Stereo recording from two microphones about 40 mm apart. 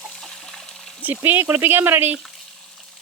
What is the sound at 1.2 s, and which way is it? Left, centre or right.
Speech, right.